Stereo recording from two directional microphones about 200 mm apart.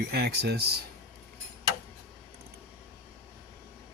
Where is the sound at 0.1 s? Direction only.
50° right (ahead or behind).